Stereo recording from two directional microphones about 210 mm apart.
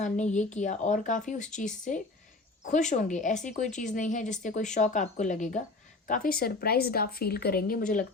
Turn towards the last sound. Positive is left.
turn(degrees=40)  # may be behind; listen again after turning